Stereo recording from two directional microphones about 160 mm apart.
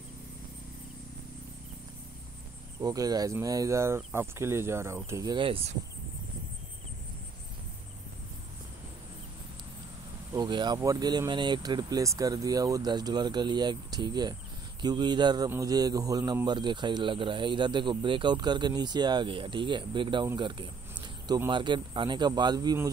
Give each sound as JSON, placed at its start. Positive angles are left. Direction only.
{"t": 2.8, "sound": "a man's voice", "side_deg": -25}
{"t": 10.3, "sound": "a man's voice", "side_deg": -25}
{"t": 20.3, "sound": "a sound", "side_deg": -30}
{"t": 21.5, "sound": "a man's voice", "side_deg": -30}